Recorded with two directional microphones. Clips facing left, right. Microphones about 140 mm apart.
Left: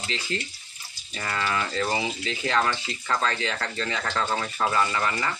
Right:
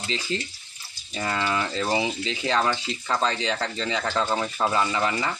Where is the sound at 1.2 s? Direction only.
25° right (ahead or behind).